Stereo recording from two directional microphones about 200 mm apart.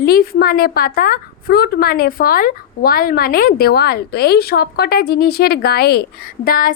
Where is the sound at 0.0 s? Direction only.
50° left (ahead or behind).